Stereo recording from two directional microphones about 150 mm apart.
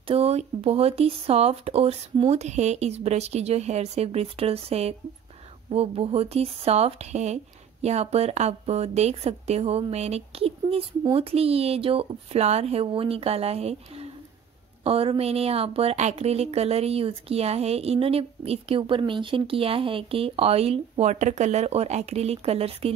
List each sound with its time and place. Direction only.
0.0 s a woman's voice: 40° right (ahead or behind)